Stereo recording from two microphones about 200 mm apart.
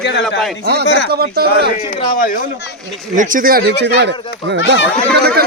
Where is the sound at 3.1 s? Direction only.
40° right (ahead or behind).